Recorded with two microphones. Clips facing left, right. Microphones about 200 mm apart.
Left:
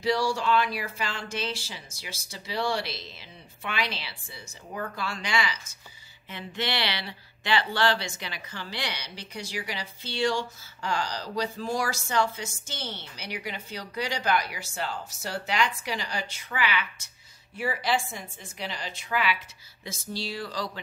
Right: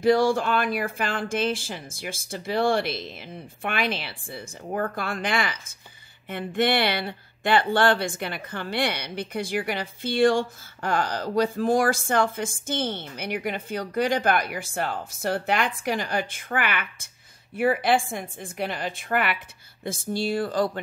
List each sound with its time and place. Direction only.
0.0 s speech: 50° right (ahead or behind)